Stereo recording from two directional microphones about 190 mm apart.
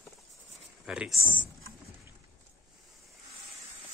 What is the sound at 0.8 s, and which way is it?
Speech, centre (ahead or behind).